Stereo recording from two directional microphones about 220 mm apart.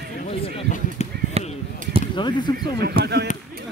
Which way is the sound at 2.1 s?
20° left (ahead or behind).